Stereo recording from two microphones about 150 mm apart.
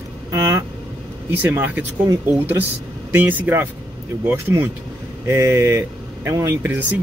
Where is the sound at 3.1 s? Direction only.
10° right (ahead or behind).